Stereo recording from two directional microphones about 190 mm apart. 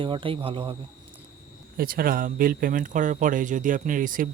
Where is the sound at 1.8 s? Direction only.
50° right (ahead or behind).